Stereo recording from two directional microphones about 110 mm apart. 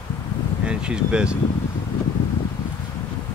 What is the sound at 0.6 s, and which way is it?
Speech, 10° right (ahead or behind).